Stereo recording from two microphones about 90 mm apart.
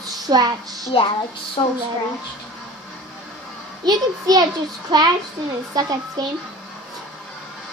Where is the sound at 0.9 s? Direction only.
75° left (ahead or behind).